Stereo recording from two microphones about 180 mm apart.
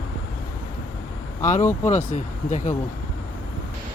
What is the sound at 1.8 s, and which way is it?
Speech, 40° left (ahead or behind).